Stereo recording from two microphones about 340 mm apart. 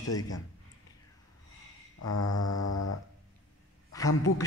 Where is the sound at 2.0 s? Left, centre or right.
Left.